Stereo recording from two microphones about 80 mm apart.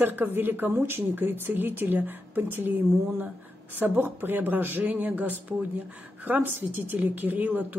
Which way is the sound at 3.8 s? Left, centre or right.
Right.